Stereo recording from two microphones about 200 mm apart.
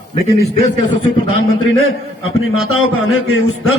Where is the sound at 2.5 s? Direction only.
90° left.